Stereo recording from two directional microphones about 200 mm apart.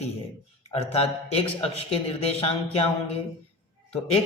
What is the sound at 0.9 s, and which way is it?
A man's voice, 30° left (ahead or behind).